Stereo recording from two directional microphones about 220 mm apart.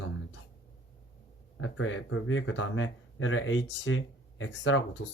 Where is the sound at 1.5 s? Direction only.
60° left (ahead or behind).